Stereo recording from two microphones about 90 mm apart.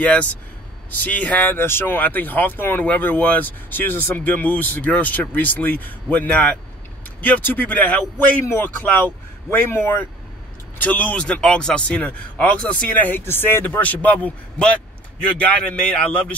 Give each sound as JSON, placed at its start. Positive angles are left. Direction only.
{"t": 0.0, "sound": "speech", "side_deg": 15}